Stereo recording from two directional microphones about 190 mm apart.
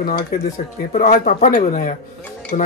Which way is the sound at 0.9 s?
40° left (ahead or behind).